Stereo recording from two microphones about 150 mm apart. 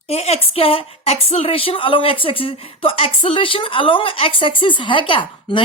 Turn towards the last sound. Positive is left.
turn(degrees=35)  # may be behind; listen again after turning